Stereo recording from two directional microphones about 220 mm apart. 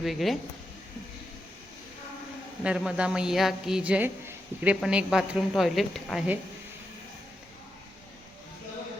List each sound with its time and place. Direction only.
0.0 s a woman's voice: centre (ahead or behind)
2.6 s a woman's voice: 5° right (ahead or behind)